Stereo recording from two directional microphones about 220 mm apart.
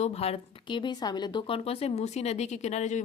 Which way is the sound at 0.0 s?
30° left (ahead or behind).